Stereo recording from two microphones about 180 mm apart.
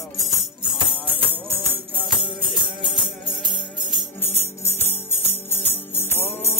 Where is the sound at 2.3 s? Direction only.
25° left (ahead or behind).